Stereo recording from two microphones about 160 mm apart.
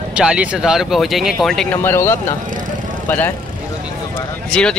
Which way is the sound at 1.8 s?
15° left (ahead or behind).